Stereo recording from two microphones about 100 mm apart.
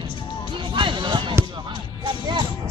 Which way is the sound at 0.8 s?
50° right (ahead or behind).